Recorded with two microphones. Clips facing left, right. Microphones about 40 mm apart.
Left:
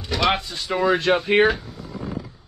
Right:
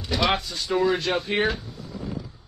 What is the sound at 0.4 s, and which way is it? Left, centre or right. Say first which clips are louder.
Speech: even; left.